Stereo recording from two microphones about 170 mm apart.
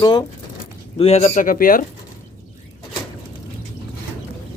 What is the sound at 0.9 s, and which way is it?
Speech, 40° left (ahead or behind).